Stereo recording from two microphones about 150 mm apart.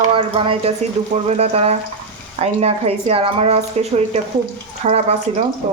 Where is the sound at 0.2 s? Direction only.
35° right (ahead or behind).